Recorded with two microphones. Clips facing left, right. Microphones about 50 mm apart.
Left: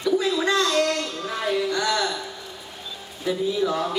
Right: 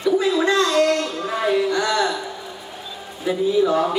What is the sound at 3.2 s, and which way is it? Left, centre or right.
Speech, centre.